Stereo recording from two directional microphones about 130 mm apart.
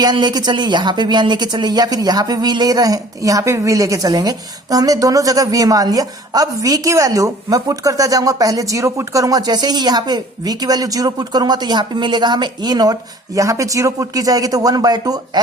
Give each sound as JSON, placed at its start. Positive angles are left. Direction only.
{"t": 0.0, "sound": "speech", "side_deg": -35}